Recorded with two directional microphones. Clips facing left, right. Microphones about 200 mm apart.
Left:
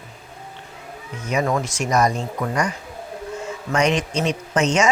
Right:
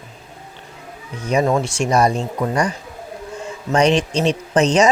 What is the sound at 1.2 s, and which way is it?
Speech, 30° right (ahead or behind).